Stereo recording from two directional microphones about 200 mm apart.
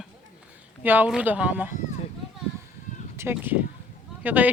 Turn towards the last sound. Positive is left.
turn(degrees=-10)  # may be behind; listen again after turning